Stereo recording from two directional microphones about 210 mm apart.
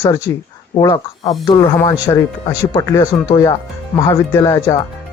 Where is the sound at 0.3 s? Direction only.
15° left (ahead or behind).